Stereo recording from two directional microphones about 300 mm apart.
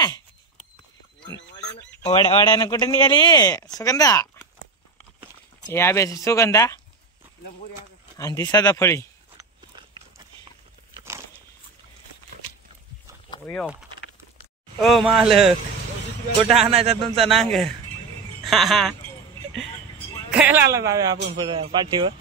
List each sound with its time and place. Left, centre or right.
2.0 s speech: centre
5.7 s speech: centre
8.2 s speech: centre
9.4 s biting: centre
13.5 s speech: centre
16.6 s speech: centre
17.3 s speech: centre
20.3 s speech: centre